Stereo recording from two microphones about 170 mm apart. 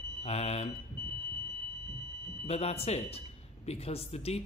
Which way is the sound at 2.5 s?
40° left (ahead or behind).